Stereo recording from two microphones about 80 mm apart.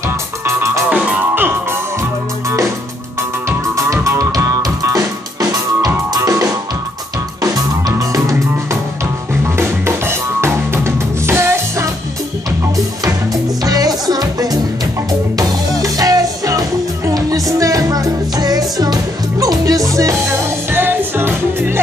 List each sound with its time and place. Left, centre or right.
0.5 s music: right
0.8 s music: centre
1.3 s music: right
3.4 s music: right
9.3 s drum kit: right
12.7 s music: right
20.7 s music: right